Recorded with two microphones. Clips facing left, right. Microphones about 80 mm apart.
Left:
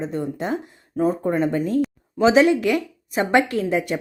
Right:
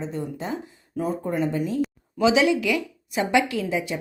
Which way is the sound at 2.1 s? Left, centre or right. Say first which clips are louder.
Left 4 dB; left.